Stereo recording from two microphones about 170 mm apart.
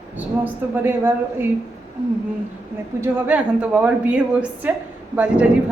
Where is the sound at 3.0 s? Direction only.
10° right (ahead or behind).